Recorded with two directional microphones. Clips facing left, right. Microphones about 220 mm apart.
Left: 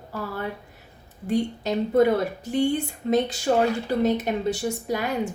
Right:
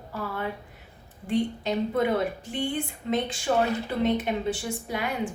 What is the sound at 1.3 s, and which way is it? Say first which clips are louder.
Speech: left 2 dB; 40° left (ahead or behind).